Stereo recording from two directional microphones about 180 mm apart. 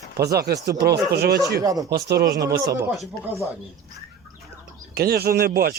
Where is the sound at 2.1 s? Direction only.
60° right (ahead or behind).